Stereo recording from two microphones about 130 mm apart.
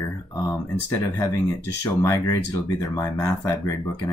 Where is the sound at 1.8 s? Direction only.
25° left (ahead or behind).